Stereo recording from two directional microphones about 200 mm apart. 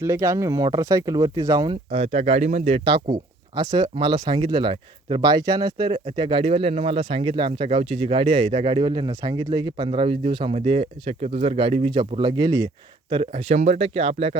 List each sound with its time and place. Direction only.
0.0 s speech: 15° right (ahead or behind); by 14.3 s 30° right (ahead or behind)